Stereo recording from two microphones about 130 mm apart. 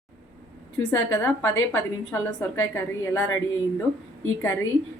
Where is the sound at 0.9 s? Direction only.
15° left (ahead or behind).